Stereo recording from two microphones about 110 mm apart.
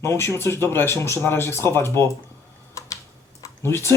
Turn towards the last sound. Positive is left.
turn(degrees=25)  # may be behind; listen again after turning